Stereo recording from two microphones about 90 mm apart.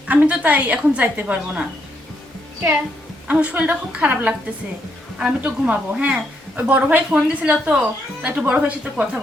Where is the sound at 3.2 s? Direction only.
15° right (ahead or behind).